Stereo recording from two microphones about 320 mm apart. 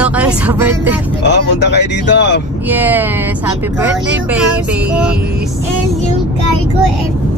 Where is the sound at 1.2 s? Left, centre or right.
Left.